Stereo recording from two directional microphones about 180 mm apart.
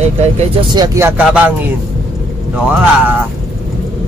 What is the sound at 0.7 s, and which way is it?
Speech, 20° right (ahead or behind).